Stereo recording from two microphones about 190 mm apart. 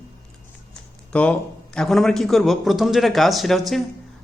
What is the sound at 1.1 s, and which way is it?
Speech, 5° left (ahead or behind).